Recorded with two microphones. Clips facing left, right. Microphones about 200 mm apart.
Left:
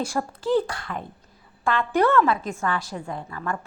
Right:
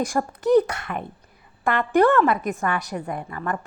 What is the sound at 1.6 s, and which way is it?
Speech, 60° right (ahead or behind).